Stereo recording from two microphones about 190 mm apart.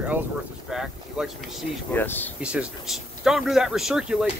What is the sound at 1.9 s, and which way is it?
Speech, 10° left (ahead or behind).